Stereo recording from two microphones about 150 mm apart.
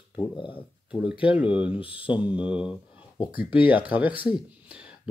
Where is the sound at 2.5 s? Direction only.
35° left (ahead or behind).